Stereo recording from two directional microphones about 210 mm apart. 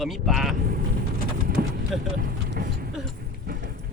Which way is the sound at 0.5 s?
45° right (ahead or behind).